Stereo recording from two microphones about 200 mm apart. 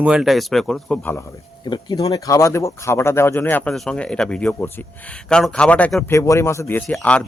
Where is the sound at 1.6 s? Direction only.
20° left (ahead or behind); by 6.1 s 5° left (ahead or behind).